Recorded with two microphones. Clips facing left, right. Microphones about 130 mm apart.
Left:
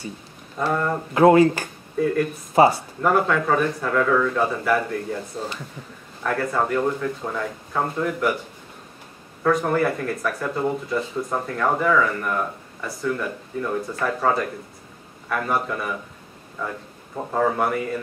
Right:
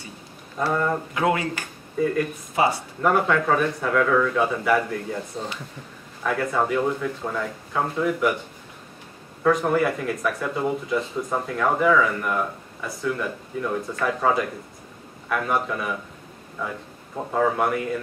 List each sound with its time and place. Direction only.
0.6 s speech: centre (ahead or behind)
1.1 s speech: 35° left (ahead or behind)
3.0 s speech: centre (ahead or behind)
9.4 s speech: centre (ahead or behind)